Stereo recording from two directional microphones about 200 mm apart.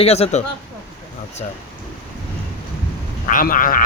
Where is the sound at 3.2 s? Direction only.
45° left (ahead or behind).